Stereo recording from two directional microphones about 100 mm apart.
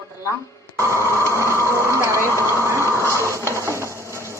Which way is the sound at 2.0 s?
30° left (ahead or behind).